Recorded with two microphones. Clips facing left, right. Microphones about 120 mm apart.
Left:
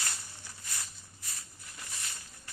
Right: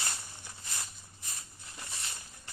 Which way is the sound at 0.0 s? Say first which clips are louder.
Right 1 dB; 20° right (ahead or behind).